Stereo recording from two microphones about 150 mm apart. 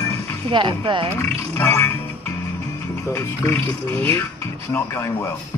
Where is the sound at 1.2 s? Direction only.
15° left (ahead or behind).